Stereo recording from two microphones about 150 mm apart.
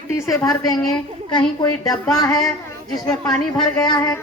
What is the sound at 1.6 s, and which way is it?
Speech, 25° left (ahead or behind).